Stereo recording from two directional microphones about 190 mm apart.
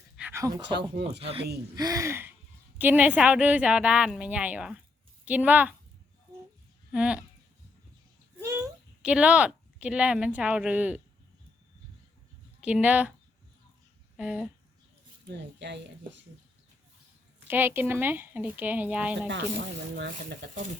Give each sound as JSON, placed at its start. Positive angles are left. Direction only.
{"t": 0.2, "sound": "a sound", "side_deg": -10}
{"t": 0.7, "sound": "speech", "side_deg": -60}
{"t": 1.7, "sound": "a woman's voice", "side_deg": -20}
{"t": 6.9, "sound": "speech", "side_deg": -5}
{"t": 8.4, "sound": "speech", "side_deg": -15}
{"t": 12.5, "sound": "speech", "side_deg": -5}
{"t": 14.2, "sound": "speech", "side_deg": -5}
{"t": 15.3, "sound": "speech", "side_deg": -65}
{"t": 17.5, "sound": "a woman's voice", "side_deg": -10}
{"t": 19.3, "sound": "speech", "side_deg": -65}